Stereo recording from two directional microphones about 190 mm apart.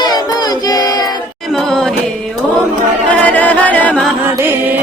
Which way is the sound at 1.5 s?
Centre (ahead or behind).